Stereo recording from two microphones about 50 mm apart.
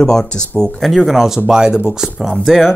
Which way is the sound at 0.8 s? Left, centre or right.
Centre.